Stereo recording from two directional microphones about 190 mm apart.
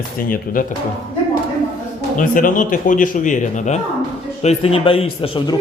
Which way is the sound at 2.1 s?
45° left (ahead or behind).